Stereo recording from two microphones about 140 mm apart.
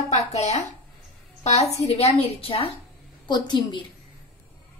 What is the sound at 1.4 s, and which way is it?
A woman's voice, 50° left (ahead or behind).